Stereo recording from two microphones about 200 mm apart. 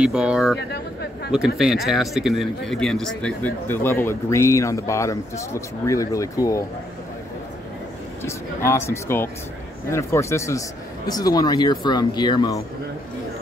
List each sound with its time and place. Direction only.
0.0 s speech: 5° right (ahead or behind)
1.6 s speech: centre (ahead or behind); by 6.6 s 15° left (ahead or behind)
8.2 s speech: 15° left (ahead or behind)